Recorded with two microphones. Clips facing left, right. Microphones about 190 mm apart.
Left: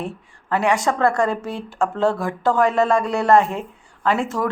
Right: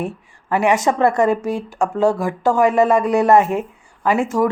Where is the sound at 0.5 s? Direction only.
20° right (ahead or behind).